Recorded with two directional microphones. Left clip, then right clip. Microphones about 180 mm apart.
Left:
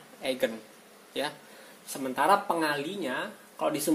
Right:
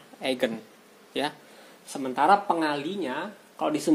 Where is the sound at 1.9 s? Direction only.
40° right (ahead or behind).